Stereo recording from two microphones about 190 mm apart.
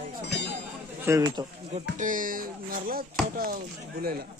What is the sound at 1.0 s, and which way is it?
Speech, 20° right (ahead or behind).